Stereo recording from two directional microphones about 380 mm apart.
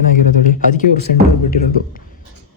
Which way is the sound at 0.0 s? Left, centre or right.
Left.